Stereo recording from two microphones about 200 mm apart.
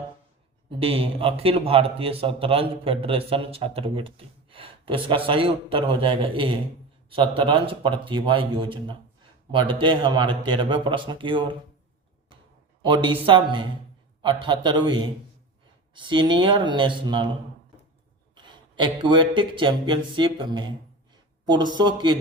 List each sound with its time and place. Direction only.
0.8 s speech: 30° right (ahead or behind)
12.8 s speech: 25° right (ahead or behind)
18.3 s speech: 25° right (ahead or behind)